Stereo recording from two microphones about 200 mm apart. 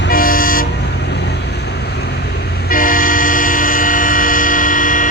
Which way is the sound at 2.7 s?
45° left (ahead or behind).